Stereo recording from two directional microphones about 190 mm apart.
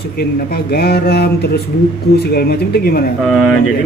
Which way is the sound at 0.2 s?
55° left (ahead or behind).